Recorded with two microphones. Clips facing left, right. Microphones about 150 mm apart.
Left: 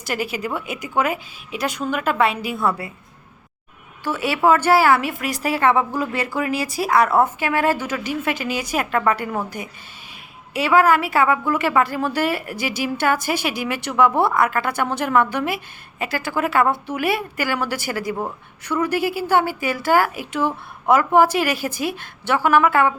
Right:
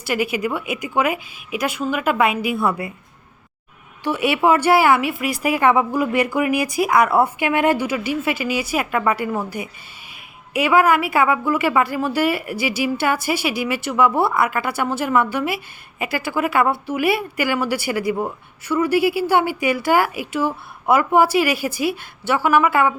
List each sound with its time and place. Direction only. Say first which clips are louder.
0.4 s speech: right 3 dB; 10° right (ahead or behind)
4.0 s speech: right 1 dB; 15° right (ahead or behind)